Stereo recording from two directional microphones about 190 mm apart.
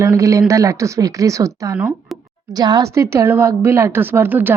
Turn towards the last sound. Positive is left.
turn(degrees=-10)  # may be behind; listen again after turning